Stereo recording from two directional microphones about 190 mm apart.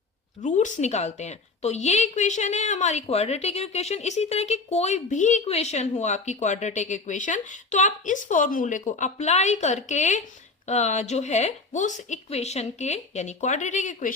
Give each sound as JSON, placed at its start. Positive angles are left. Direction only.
{"t": 0.4, "sound": "a woman's voice", "side_deg": 40}